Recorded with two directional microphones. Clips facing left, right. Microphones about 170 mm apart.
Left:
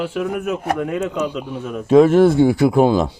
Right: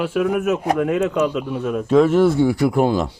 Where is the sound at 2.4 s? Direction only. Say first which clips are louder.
Left 3 dB; 55° left (ahead or behind).